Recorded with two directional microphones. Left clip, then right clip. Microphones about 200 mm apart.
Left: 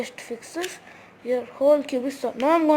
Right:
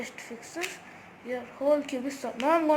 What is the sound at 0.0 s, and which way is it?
Speech, 55° left (ahead or behind).